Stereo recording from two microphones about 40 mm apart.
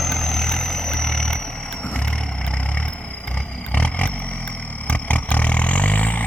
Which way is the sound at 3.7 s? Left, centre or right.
Left.